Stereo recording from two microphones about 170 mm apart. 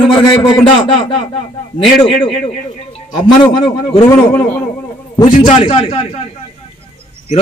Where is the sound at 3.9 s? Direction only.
25° left (ahead or behind).